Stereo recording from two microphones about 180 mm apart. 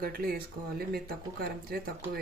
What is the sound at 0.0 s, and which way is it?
Speech, 55° right (ahead or behind).